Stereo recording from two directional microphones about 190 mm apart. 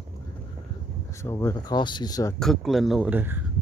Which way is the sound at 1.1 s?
15° left (ahead or behind).